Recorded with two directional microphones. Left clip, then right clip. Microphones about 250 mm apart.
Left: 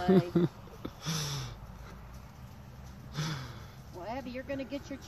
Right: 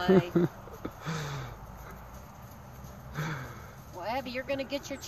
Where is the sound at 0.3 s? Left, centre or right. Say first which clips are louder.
Right 2 dB; centre.